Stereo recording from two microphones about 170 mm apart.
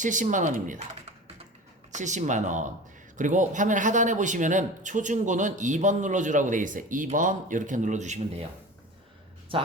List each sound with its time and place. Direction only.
0.0 s a man's voice: 50° right (ahead or behind)
1.9 s a man's voice: 45° right (ahead or behind)
9.5 s speech: 30° right (ahead or behind)